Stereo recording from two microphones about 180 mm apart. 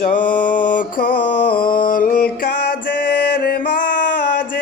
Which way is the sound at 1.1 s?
30° left (ahead or behind).